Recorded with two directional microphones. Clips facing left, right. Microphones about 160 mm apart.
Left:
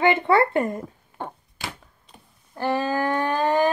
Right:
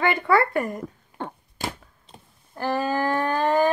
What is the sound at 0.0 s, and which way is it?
Speech, 25° left (ahead or behind).